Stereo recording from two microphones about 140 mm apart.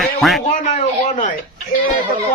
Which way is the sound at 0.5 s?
65° left (ahead or behind).